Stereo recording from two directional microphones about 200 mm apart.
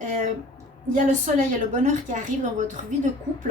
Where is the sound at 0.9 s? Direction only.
40° right (ahead or behind).